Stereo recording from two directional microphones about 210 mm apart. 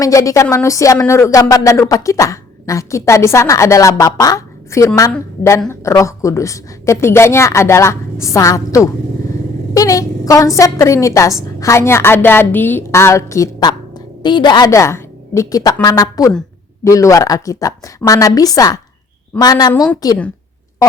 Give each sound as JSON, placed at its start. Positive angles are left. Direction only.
{"t": 0.0, "sound": "a woman's voice", "side_deg": 15}